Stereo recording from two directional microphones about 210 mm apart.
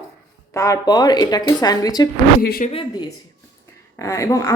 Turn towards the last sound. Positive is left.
turn(degrees=15)  # may be behind; listen again after turning